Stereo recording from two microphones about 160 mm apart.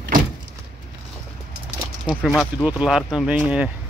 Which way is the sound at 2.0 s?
5° left (ahead or behind).